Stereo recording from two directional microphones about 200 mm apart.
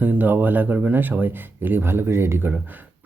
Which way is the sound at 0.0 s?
10° right (ahead or behind).